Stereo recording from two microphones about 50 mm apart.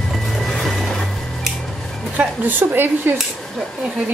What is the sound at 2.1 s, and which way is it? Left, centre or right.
A woman's voice, right.